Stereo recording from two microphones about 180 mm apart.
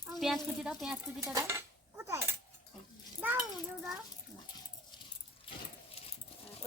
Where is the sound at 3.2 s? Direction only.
10° right (ahead or behind).